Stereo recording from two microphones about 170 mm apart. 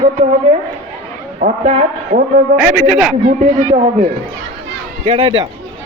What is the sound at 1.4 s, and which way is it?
Speech, 40° right (ahead or behind).